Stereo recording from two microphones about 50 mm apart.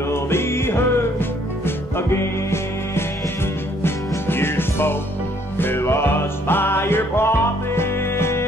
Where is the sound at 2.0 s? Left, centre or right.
Left.